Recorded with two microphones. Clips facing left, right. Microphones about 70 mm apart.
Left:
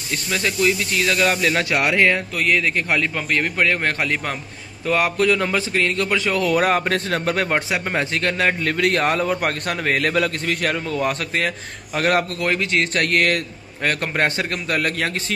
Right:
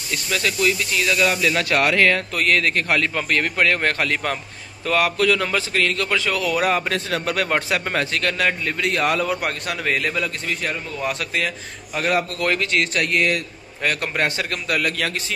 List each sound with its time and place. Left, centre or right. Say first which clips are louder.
0.1 s speech: even; left
1.6 s a man's voice: right 2 dB; left
4.8 s a man's voice: left 1 dB; left
6.4 s speech: left 2 dB; left
7.4 s a man's voice: even; left
8.6 s a man's voice: left 3 dB; left
9.0 s a man's voice: left 1 dB; left
11.1 s a man's voice: left 2 dB; left
12.4 s a man's voice: even; left
12.9 s a man's voice: left 1 dB; left
13.8 s speech: left 1 dB; left